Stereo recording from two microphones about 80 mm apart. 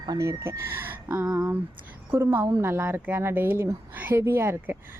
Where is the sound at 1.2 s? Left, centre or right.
Centre.